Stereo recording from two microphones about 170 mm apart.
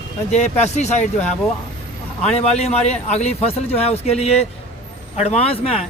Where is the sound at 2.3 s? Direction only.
40° left (ahead or behind).